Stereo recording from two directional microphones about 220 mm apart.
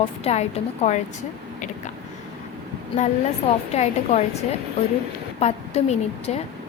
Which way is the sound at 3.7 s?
30° left (ahead or behind).